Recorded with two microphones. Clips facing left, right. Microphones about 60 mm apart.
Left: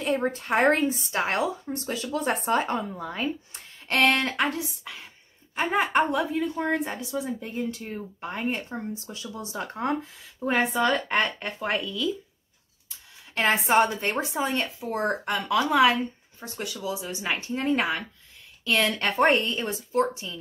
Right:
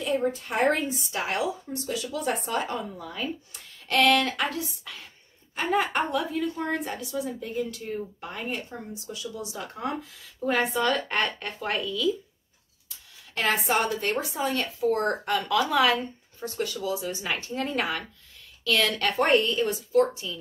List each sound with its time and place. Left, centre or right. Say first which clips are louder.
0.0 s a woman's voice: even; left
10.5 s speech: left 1 dB; centre
13.7 s a woman's voice: left 3 dB; left